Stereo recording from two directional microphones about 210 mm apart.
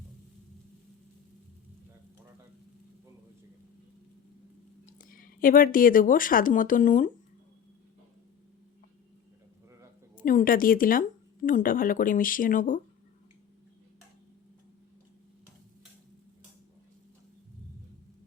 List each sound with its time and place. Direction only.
4.9 s speech: 40° left (ahead or behind)
10.2 s speech: 40° left (ahead or behind)